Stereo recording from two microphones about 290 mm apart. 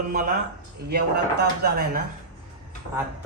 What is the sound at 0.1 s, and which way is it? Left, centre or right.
A man's voice, right.